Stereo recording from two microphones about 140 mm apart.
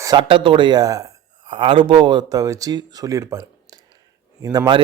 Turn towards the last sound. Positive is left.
turn(degrees=-30)  # may be behind; listen again after turning